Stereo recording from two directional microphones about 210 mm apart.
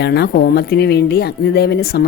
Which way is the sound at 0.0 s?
50° left (ahead or behind).